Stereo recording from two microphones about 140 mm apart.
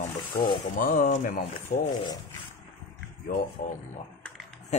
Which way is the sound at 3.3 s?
65° left (ahead or behind).